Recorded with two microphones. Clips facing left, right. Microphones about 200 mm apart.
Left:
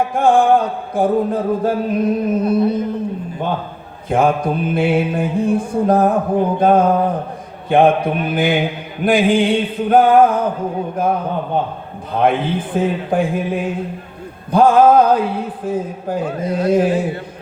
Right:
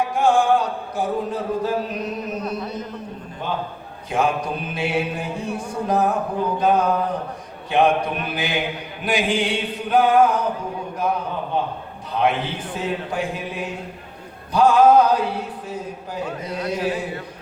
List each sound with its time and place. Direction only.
0.1 s mantra: 55° left (ahead or behind)
2.4 s a sound: 30° left (ahead or behind)
4.1 s mantra: 55° left (ahead or behind)